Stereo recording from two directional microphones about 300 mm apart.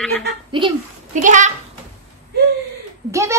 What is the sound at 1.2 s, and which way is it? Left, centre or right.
Speech, right.